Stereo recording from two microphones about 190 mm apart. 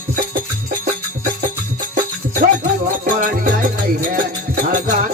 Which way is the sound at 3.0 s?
45° right (ahead or behind).